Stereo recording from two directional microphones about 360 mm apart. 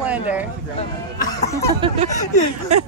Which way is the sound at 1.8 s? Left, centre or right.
Centre.